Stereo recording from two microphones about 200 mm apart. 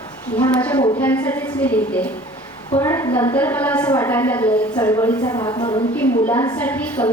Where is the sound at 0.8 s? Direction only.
25° left (ahead or behind).